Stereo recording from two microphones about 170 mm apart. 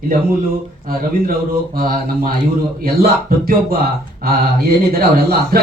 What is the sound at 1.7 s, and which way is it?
A man's voice, 60° right (ahead or behind).